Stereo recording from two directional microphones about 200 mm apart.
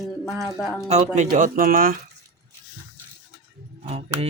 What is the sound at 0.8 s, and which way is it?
Speech, 35° right (ahead or behind).